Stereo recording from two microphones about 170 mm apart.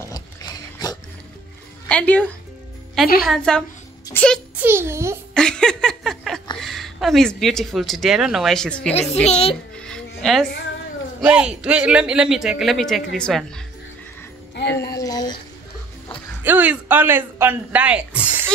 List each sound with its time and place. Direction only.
0.8 s music: 25° left (ahead or behind)
1.9 s a man's voice: 5° left (ahead or behind)
4.6 s speech: 15° right (ahead or behind)
5.3 s a sound: 5° left (ahead or behind)
6.5 s speech: centre (ahead or behind)
9.1 s a woman's voice: 40° left (ahead or behind)
9.8 s music: 5° left (ahead or behind)
11.1 s a man's voice: 5° right (ahead or behind)
15.0 s a sound: 20° left (ahead or behind)
16.4 s speech: 10° right (ahead or behind)